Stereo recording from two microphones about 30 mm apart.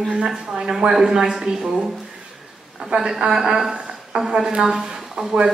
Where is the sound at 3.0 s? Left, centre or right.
Right.